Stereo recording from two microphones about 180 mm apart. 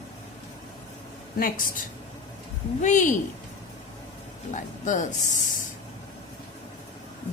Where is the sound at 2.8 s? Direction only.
45° left (ahead or behind).